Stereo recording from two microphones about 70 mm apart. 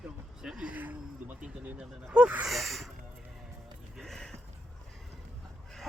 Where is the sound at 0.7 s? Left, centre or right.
Right.